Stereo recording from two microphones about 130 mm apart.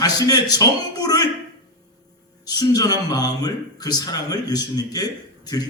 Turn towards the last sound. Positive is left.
turn(degrees=30)  # may be behind; listen again after turning